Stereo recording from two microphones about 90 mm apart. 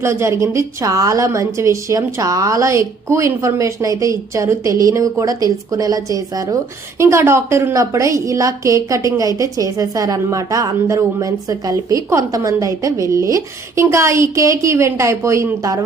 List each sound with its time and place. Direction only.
0.0 s a woman's voice: 30° right (ahead or behind)